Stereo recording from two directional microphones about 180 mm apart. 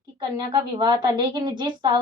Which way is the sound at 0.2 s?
25° right (ahead or behind).